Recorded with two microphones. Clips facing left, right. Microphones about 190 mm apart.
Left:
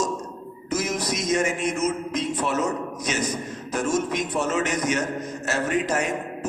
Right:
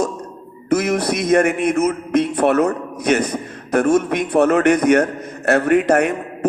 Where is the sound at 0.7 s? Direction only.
60° right (ahead or behind).